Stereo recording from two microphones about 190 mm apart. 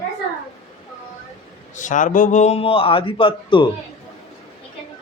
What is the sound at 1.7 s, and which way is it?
A man's voice, 40° left (ahead or behind).